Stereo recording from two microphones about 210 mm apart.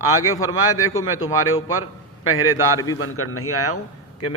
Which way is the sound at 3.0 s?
90° left.